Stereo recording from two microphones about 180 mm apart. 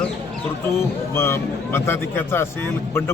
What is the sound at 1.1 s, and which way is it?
Speech, 15° left (ahead or behind).